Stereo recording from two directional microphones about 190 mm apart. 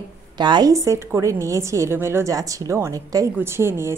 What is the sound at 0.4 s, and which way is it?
A woman's voice, 25° right (ahead or behind).